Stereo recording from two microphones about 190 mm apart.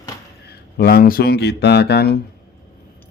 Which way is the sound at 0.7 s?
55° left (ahead or behind).